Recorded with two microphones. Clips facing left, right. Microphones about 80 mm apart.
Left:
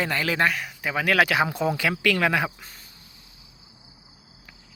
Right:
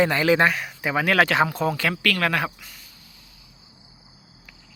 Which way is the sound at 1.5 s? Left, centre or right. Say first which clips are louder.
Right 1 dB; centre.